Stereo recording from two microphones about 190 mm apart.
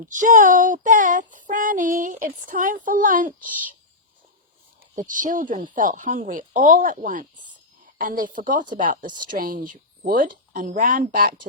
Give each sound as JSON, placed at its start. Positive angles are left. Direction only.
{"t": 0.1, "sound": "speech", "side_deg": -40}
{"t": 4.9, "sound": "speech", "side_deg": -45}